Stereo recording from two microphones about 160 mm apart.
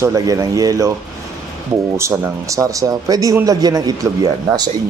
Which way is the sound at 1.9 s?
20° right (ahead or behind).